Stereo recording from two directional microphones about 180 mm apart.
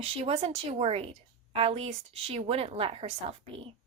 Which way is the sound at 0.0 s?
35° right (ahead or behind).